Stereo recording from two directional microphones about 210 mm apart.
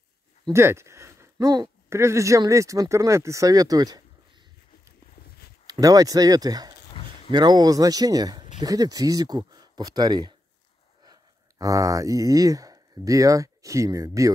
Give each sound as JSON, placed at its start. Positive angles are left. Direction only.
{"t": 0.5, "sound": "speech", "side_deg": -10}
{"t": 5.7, "sound": "speech", "side_deg": -15}